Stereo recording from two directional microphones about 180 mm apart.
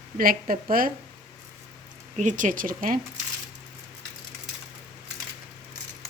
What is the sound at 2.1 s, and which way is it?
Speech, 45° right (ahead or behind).